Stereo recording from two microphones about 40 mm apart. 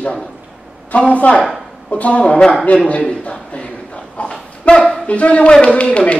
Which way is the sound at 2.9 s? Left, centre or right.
Left.